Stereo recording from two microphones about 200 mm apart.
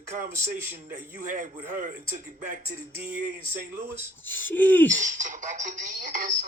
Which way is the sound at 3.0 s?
40° right (ahead or behind).